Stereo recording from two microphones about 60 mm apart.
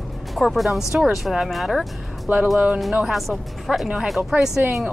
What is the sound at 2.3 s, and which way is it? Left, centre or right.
Speech, right.